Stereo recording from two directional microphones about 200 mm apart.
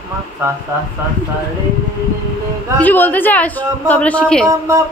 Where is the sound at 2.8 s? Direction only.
10° left (ahead or behind).